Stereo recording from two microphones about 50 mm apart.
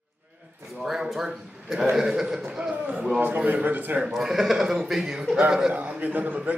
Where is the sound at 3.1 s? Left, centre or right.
Right.